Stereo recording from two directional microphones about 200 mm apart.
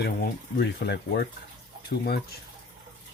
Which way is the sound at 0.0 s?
50° left (ahead or behind).